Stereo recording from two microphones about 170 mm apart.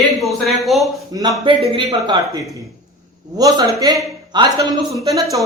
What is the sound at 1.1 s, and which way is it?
Speech, 25° right (ahead or behind).